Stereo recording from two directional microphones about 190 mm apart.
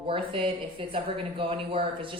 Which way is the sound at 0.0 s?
25° right (ahead or behind).